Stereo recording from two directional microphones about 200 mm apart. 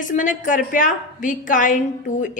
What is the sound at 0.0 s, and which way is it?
A woman's voice, 40° left (ahead or behind).